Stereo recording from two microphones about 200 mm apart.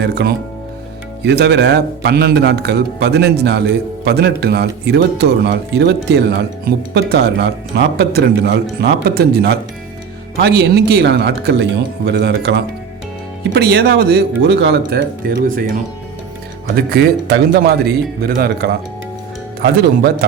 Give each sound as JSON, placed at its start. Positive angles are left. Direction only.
{"t": 0.0, "sound": "a man's voice", "side_deg": -55}
{"t": 16.6, "sound": "a man's voice", "side_deg": -50}